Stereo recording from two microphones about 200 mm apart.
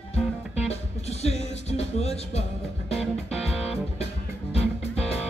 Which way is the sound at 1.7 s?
30° left (ahead or behind).